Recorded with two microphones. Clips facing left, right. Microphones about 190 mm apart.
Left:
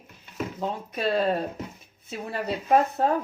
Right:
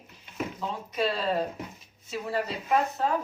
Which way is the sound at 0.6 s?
55° left (ahead or behind).